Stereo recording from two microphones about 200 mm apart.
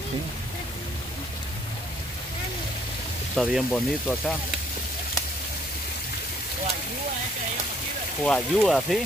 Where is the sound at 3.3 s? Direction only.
5° left (ahead or behind).